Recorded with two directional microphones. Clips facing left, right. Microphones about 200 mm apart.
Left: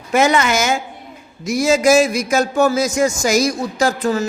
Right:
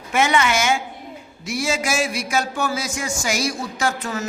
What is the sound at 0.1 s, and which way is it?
A man's voice, 40° left (ahead or behind).